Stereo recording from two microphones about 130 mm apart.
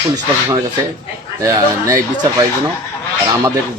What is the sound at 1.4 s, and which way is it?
Speech, 25° right (ahead or behind).